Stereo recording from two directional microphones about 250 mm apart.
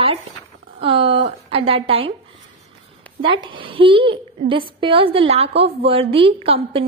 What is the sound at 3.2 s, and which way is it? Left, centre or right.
A woman's voice, right.